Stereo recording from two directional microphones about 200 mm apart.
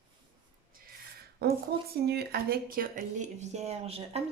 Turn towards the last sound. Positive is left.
turn(degrees=-30)  # may be behind; listen again after turning